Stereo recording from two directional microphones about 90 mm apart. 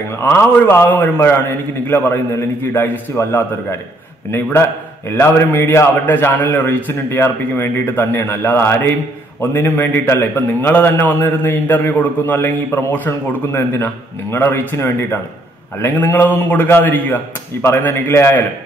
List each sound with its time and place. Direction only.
0.7 s a man's voice: 25° left (ahead or behind)